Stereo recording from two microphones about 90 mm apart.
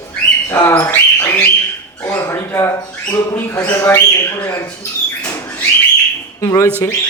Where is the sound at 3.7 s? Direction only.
25° left (ahead or behind).